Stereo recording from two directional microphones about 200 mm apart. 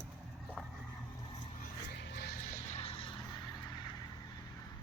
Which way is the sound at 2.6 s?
30° left (ahead or behind).